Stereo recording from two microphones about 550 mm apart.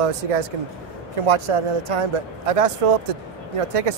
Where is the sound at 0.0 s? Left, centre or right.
Right.